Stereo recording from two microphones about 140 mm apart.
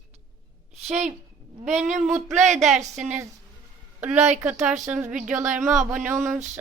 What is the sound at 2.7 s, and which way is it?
Speech, centre (ahead or behind).